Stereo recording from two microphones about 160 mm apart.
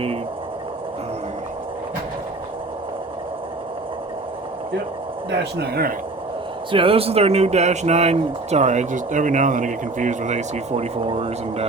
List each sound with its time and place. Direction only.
5.4 s speech: 90° right
6.7 s speech: 35° right (ahead or behind)